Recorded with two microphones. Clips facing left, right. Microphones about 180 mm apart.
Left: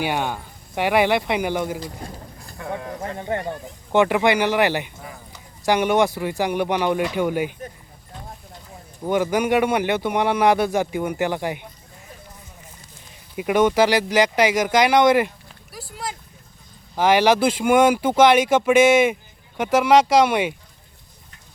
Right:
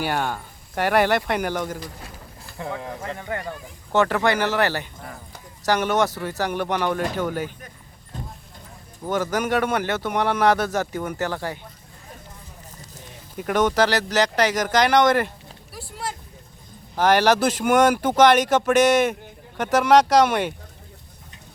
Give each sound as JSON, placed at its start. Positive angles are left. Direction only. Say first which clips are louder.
{"t": 0.1, "sound": "speech", "louder": "left 1 dB", "side_deg": 15}
{"t": 2.0, "sound": "speech", "louder": "left 6 dB", "side_deg": 40}
{"t": 2.7, "sound": "speech", "louder": "left 2 dB", "side_deg": 25}
{"t": 3.9, "sound": "speech", "louder": "left 3 dB", "side_deg": 15}
{"t": 9.0, "sound": "speech", "louder": "left 3 dB", "side_deg": 15}
{"t": 13.3, "sound": "speech", "louder": "left 3 dB", "side_deg": 10}
{"t": 15.7, "sound": "a sound", "louder": "even", "side_deg": 0}
{"t": 16.9, "sound": "speech", "louder": "left 1 dB", "side_deg": 10}